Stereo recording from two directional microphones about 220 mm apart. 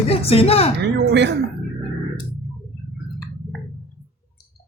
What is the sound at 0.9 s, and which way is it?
Speech, 50° right (ahead or behind).